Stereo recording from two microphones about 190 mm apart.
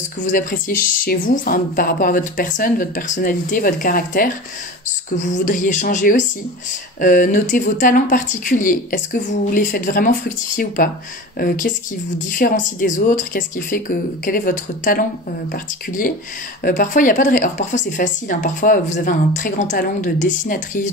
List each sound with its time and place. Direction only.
0.2 s speech: 45° left (ahead or behind)
5.4 s speech: 45° left (ahead or behind)